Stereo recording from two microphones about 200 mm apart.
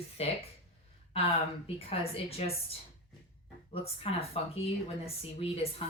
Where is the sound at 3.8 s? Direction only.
30° left (ahead or behind).